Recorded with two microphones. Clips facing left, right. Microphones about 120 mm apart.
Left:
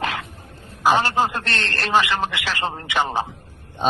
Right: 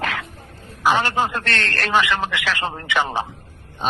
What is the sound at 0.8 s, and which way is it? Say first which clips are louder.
Speech: left 1 dB; 30° left (ahead or behind).